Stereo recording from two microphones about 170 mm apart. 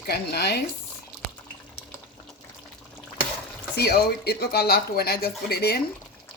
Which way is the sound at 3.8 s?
70° left (ahead or behind).